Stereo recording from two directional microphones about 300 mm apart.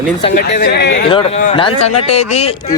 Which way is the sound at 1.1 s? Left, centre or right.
Centre.